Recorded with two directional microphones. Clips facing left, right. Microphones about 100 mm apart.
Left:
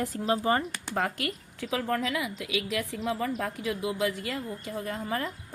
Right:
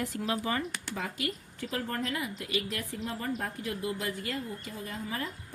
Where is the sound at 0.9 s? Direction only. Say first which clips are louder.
Left 8 dB; 60° left (ahead or behind).